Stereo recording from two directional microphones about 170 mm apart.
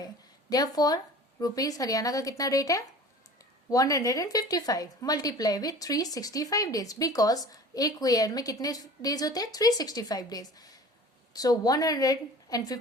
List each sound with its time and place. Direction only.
0.5 s a woman's voice: 25° left (ahead or behind)